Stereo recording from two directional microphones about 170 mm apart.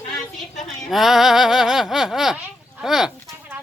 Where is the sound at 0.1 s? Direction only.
Centre (ahead or behind).